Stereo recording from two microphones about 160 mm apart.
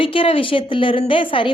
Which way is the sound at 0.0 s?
35° left (ahead or behind).